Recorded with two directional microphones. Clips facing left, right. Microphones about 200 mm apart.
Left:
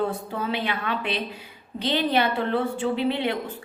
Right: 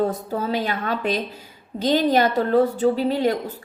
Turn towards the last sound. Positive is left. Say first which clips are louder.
# right 4 dB
turn(degrees=-40)  # may be behind; listen again after turning